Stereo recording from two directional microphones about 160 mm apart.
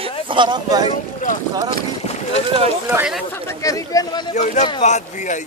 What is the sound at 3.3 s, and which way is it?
Speech, 20° left (ahead or behind).